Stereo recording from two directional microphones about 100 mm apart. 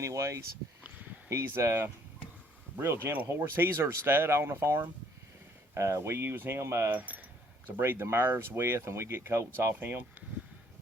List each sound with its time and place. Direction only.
0.0 s speech: 30° right (ahead or behind)